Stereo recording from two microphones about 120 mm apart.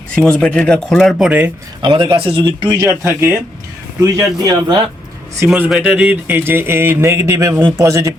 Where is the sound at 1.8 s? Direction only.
45° right (ahead or behind).